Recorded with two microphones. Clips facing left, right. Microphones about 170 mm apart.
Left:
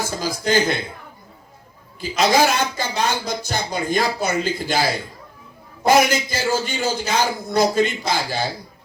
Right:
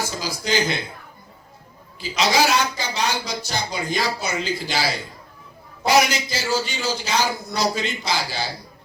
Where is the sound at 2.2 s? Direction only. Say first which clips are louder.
Left 2 dB; 50° left (ahead or behind).